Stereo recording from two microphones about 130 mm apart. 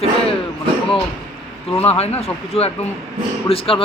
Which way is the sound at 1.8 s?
50° left (ahead or behind).